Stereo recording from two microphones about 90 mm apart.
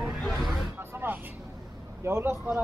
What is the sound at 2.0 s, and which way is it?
Speech, 30° right (ahead or behind).